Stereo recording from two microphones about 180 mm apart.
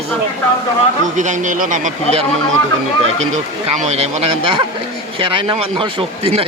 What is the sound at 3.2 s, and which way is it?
Speech, 35° right (ahead or behind).